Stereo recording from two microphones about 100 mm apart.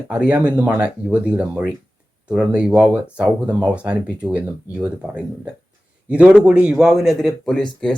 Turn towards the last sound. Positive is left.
turn(degrees=10)  # may be behind; listen again after turning